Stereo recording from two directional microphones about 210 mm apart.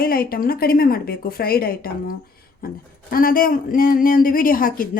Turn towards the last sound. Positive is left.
turn(degrees=40)  # may be behind; listen again after turning